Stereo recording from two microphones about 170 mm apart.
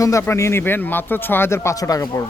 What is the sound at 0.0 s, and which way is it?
Speech, 15° left (ahead or behind).